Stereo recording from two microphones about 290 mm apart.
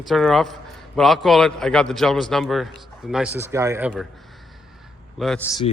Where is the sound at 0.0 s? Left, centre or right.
Centre.